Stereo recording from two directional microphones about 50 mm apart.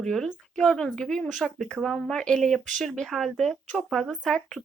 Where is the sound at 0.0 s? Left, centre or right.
Centre.